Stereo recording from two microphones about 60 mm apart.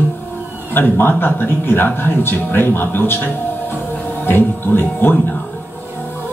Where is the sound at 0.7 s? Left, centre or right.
Left.